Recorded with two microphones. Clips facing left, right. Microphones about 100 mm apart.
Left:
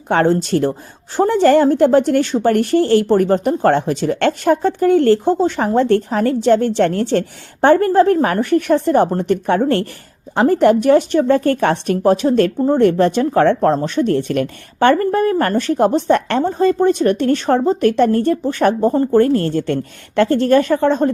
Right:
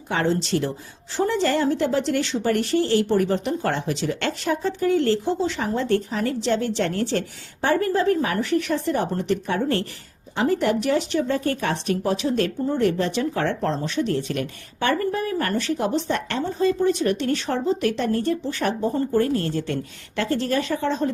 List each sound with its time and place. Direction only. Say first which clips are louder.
0.1 s a woman's voice: left 8 dB; 55° left (ahead or behind)